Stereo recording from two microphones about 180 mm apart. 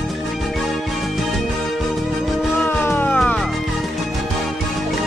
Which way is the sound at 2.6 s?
10° left (ahead or behind).